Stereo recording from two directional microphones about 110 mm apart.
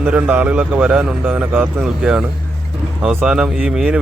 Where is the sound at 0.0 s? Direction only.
15° right (ahead or behind).